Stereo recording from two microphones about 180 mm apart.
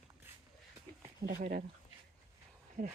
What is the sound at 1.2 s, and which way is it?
Speech, 60° right (ahead or behind).